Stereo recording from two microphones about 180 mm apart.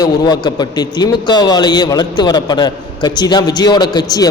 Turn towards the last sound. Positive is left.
turn(degrees=20)  # may be behind; listen again after turning